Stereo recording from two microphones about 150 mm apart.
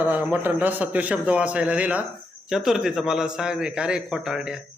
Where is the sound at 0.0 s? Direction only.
10° right (ahead or behind).